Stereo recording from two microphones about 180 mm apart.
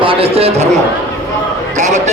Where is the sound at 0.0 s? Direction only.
30° right (ahead or behind).